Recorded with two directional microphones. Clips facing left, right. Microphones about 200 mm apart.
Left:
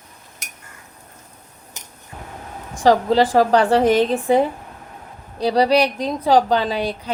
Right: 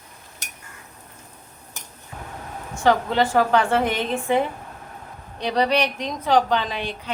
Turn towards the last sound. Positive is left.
turn(degrees=35)  # may be behind; listen again after turning